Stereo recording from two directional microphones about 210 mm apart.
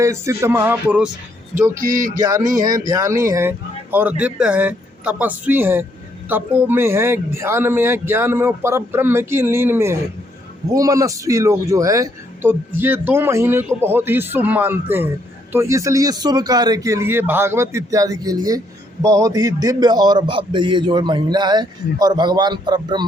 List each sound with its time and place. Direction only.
0.0 s speech: 15° right (ahead or behind)
1.7 s a sound: 40° right (ahead or behind)
2.6 s a man's voice: 20° right (ahead or behind)